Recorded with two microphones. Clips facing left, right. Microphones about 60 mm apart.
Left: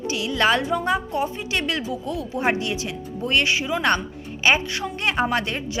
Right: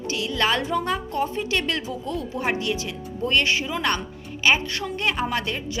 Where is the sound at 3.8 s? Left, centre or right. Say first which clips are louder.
Left 4 dB; left.